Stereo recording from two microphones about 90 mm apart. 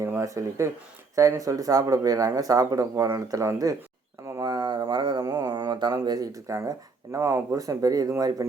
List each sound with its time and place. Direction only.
0.0 s speech: 35° right (ahead or behind)
4.4 s a sound: 50° right (ahead or behind)
8.2 s speech: 45° right (ahead or behind)